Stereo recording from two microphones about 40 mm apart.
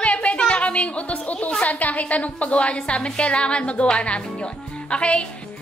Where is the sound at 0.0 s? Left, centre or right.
Left.